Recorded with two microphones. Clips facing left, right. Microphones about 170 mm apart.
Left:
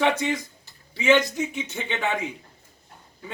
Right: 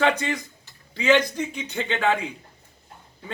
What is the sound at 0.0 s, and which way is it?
Speech, 15° left (ahead or behind).